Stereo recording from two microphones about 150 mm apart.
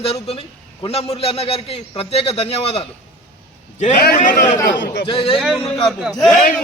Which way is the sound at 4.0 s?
70° left (ahead or behind).